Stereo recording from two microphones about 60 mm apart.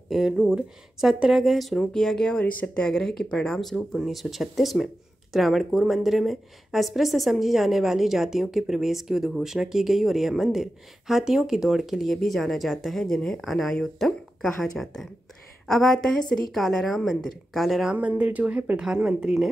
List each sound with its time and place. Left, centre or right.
0.1 s speech: centre
17.9 s speech: right
18.8 s speech: centre